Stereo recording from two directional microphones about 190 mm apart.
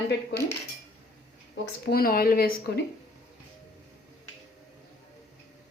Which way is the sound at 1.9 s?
50° left (ahead or behind).